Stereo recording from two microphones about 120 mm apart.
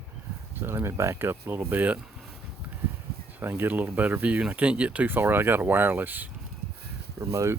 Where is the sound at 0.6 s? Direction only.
20° right (ahead or behind).